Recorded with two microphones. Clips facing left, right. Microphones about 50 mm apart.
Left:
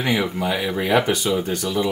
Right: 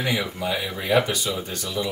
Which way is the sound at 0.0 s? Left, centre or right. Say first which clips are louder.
Left 4 dB; left.